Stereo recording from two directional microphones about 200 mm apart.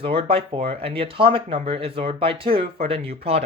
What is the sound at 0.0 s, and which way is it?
Speech, 25° right (ahead or behind).